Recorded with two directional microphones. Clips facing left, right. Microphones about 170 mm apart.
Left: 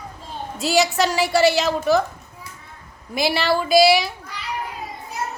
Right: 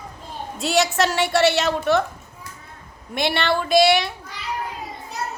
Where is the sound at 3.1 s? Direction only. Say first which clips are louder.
Left 1 dB; centre (ahead or behind).